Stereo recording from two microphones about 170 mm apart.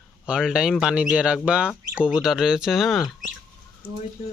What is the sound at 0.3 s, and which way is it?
Speech, 5° right (ahead or behind).